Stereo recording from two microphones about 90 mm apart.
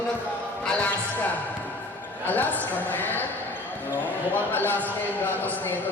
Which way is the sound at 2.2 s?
20° left (ahead or behind).